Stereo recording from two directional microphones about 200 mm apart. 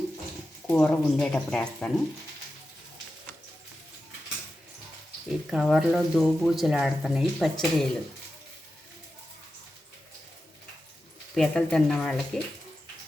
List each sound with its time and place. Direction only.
0.7 s speech: 5° left (ahead or behind)
5.5 s speech: 5° right (ahead or behind)
11.3 s speech: 5° left (ahead or behind)